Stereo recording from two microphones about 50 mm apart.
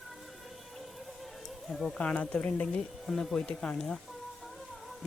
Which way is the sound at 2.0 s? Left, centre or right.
Left.